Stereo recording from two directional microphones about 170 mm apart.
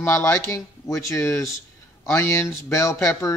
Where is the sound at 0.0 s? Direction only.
15° left (ahead or behind).